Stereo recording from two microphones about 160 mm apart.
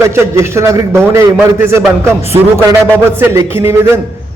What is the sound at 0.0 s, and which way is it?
A man's voice, 15° right (ahead or behind).